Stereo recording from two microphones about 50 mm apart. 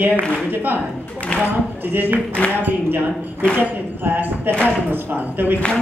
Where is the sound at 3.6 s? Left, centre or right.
Right.